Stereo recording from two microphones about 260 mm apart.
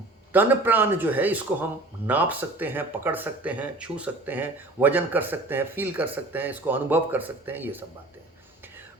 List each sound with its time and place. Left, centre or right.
0.3 s speech: centre